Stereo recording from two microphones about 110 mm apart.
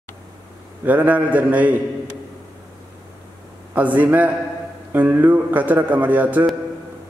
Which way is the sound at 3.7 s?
15° right (ahead or behind).